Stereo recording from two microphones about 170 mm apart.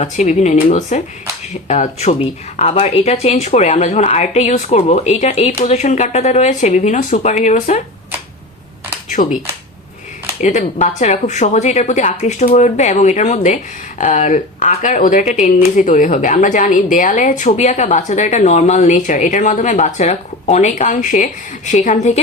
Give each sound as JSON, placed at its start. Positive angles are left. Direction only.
{"t": 0.0, "sound": "speech", "side_deg": 45}
{"t": 9.2, "sound": "speech", "side_deg": 30}
{"t": 10.4, "sound": "speech", "side_deg": 45}